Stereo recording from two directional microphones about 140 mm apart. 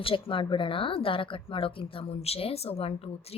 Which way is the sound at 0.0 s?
40° left (ahead or behind).